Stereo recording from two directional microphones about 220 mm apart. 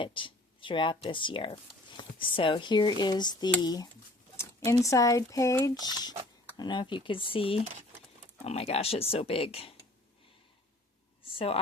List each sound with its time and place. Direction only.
0.0 s speech: 20° left (ahead or behind)
11.3 s a woman's voice: 25° left (ahead or behind)